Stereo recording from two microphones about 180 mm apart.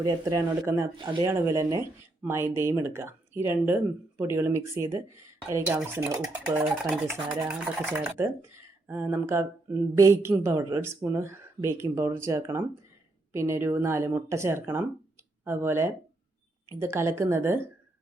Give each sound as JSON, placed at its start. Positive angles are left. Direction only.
{"t": 0.0, "sound": "speech", "side_deg": -20}
{"t": 1.3, "sound": "speech", "side_deg": -15}